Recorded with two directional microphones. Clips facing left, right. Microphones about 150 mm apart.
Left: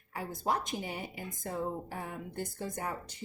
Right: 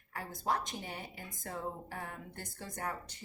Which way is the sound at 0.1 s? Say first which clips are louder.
Left 2 dB; 15° left (ahead or behind).